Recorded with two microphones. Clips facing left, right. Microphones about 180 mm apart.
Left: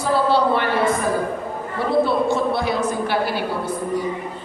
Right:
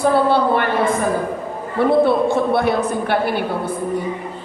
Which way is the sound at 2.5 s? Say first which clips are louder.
Right 4 dB; 55° right (ahead or behind).